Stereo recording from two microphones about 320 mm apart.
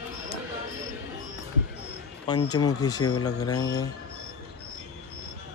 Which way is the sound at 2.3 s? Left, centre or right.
Centre.